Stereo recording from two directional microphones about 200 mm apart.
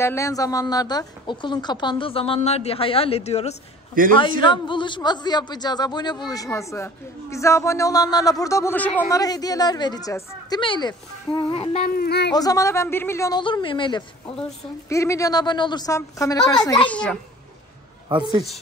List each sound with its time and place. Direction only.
0.0 s a woman's voice: 15° left (ahead or behind); by 3.5 s 30° left (ahead or behind)
4.0 s a man's voice: 45° right (ahead or behind)
4.4 s a man's voice: 25° left (ahead or behind); by 9.2 s 10° left (ahead or behind)
9.2 s a woman's voice: 20° left (ahead or behind)
11.8 s speech: 50° left (ahead or behind)
12.4 s a man's voice: 15° left (ahead or behind)
16.9 s a child's voice: 5° left (ahead or behind)
18.0 s a man's voice: 20° right (ahead or behind)